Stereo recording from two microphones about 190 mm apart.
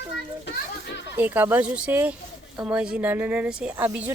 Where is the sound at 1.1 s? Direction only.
10° right (ahead or behind).